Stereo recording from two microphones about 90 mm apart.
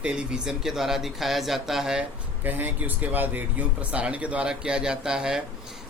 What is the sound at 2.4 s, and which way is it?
A man's voice, 20° right (ahead or behind).